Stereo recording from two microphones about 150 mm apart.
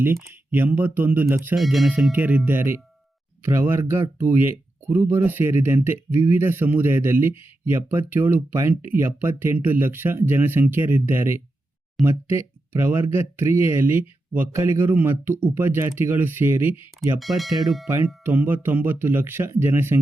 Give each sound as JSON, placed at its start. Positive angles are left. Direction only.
{"t": 0.0, "sound": "speech", "side_deg": -15}
{"t": 1.5, "sound": "speech", "side_deg": 0}
{"t": 17.2, "sound": "speech", "side_deg": 0}
{"t": 18.3, "sound": "speech", "side_deg": -10}